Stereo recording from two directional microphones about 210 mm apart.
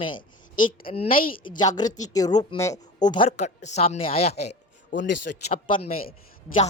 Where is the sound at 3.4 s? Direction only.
35° left (ahead or behind).